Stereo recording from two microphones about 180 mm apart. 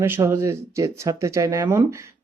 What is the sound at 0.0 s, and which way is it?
Speech, 15° right (ahead or behind).